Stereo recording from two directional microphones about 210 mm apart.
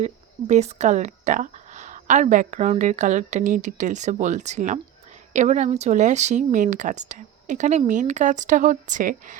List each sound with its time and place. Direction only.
0.0 s speech: 30° right (ahead or behind)